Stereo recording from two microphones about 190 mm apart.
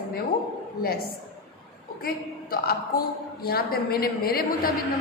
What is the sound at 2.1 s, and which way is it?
A woman's voice, 55° left (ahead or behind).